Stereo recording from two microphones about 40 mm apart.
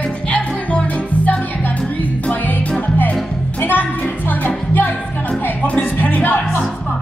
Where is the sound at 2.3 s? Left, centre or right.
Left.